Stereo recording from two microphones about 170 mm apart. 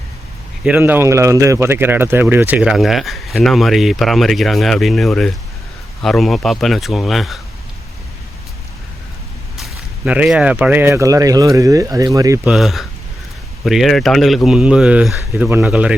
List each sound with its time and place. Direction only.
0.6 s speech: 10° right (ahead or behind)
10.1 s speech: 5° right (ahead or behind)
12.5 s speech: centre (ahead or behind)